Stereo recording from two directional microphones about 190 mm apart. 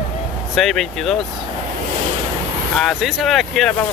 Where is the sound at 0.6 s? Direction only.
Centre (ahead or behind).